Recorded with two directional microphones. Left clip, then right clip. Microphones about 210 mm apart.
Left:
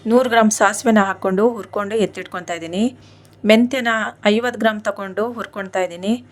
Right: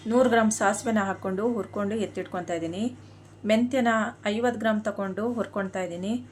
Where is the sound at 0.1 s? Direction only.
40° left (ahead or behind).